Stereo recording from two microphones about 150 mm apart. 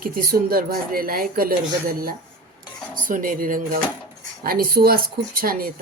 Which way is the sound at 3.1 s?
65° right (ahead or behind).